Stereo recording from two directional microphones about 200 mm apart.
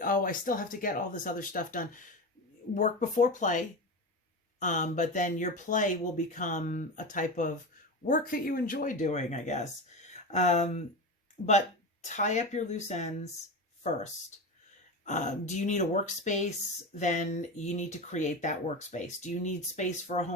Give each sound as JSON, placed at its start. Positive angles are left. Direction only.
{"t": 0.0, "sound": "speech", "side_deg": 45}
{"t": 4.6, "sound": "speech", "side_deg": 40}
{"t": 12.0, "sound": "speech", "side_deg": 35}